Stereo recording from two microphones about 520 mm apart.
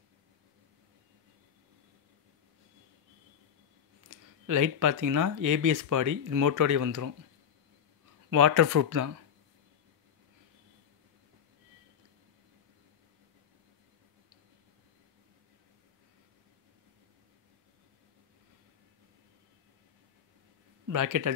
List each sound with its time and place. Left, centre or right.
4.1 s speech: right
8.3 s speech: right
20.9 s speech: right